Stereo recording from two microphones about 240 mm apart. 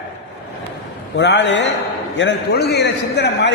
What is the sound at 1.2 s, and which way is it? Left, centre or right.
A man's voice, left.